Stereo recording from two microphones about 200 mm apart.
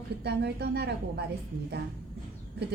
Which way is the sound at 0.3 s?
55° right (ahead or behind).